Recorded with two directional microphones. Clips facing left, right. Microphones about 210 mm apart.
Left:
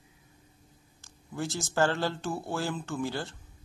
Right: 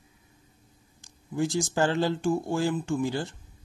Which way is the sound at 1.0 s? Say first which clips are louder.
Right 7 dB; 15° right (ahead or behind).